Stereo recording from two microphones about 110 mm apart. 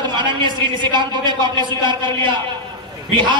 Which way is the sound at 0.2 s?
45° right (ahead or behind).